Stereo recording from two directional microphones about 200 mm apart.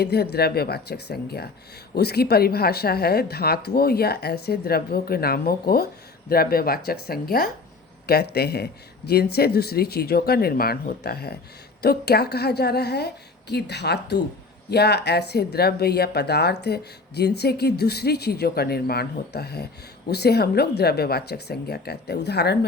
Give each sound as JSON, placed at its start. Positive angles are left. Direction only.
{"t": 0.0, "sound": "speech", "side_deg": 55}